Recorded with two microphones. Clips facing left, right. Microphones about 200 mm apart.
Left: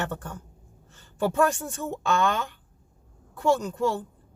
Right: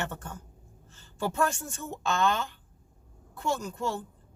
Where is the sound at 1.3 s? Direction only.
55° left (ahead or behind).